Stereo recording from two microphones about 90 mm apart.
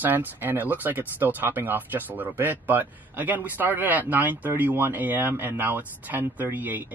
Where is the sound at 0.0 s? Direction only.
20° right (ahead or behind).